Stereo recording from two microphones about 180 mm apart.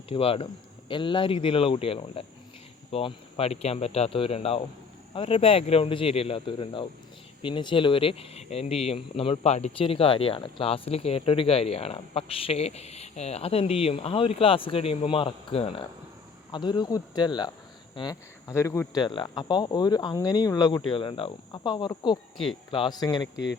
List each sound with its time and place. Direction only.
0.1 s speech: 30° left (ahead or behind)